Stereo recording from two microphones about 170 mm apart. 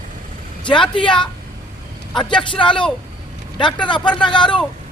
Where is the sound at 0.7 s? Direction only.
30° left (ahead or behind).